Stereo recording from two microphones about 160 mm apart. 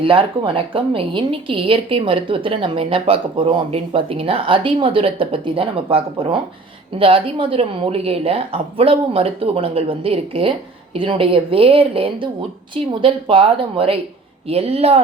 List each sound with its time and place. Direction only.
0.0 s a woman's voice: 35° right (ahead or behind)